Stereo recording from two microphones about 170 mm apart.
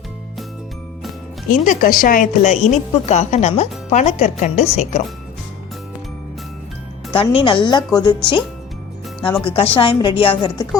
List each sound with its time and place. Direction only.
1.5 s a woman's voice: 50° left (ahead or behind)
7.1 s a woman's voice: 30° left (ahead or behind)